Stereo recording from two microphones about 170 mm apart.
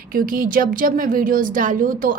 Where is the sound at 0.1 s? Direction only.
55° right (ahead or behind).